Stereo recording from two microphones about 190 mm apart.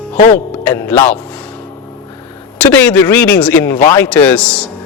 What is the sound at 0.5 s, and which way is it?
Speech, 10° left (ahead or behind).